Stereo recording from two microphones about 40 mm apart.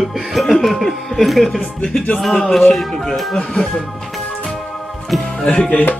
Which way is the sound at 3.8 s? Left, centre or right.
Centre.